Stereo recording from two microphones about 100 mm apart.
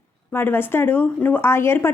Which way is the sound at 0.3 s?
20° left (ahead or behind).